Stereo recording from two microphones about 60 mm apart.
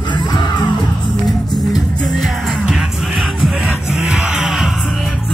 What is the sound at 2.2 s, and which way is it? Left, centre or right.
Music, centre.